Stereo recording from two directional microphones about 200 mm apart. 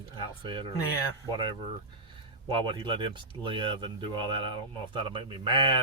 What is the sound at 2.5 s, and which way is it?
Speech, 25° right (ahead or behind).